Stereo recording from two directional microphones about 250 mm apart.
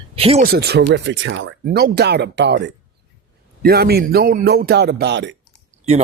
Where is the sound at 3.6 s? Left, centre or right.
Right.